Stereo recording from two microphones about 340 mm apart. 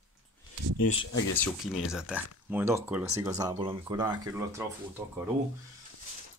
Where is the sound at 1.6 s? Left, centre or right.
Centre.